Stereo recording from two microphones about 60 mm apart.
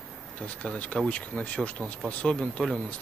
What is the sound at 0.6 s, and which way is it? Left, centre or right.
Speech, centre.